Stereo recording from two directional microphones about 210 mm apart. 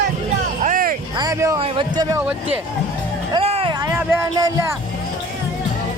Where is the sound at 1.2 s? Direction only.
15° right (ahead or behind).